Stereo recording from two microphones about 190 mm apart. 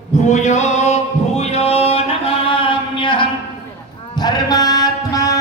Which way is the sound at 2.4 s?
25° left (ahead or behind).